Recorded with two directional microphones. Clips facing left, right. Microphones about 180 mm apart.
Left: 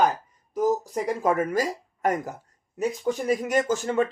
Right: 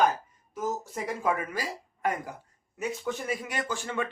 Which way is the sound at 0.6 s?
35° left (ahead or behind).